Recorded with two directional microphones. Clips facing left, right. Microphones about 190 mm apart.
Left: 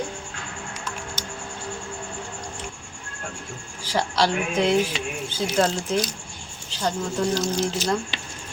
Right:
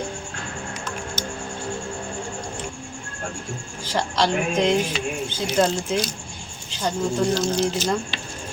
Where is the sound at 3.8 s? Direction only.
10° left (ahead or behind).